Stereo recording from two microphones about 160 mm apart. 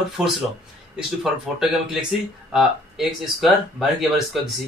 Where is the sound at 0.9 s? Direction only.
5° right (ahead or behind).